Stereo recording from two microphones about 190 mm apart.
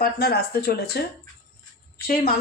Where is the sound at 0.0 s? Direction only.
55° left (ahead or behind).